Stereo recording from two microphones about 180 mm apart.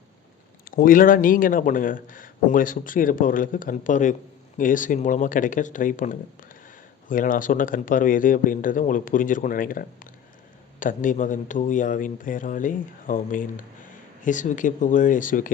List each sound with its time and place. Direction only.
0.6 s a man's voice: 50° left (ahead or behind)